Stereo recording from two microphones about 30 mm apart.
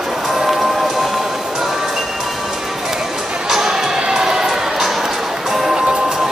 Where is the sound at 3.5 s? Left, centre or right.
Centre.